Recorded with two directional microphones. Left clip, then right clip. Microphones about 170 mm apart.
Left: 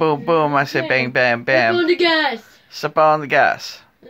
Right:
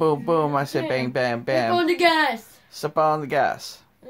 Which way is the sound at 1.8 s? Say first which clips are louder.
Left 3 dB; 25° right (ahead or behind).